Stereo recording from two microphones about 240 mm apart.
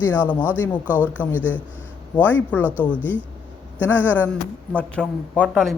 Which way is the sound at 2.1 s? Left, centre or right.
Centre.